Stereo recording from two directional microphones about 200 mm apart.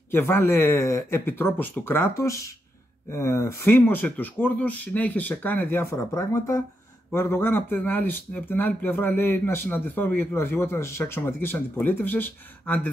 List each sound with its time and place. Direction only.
0.1 s speech: 10° left (ahead or behind)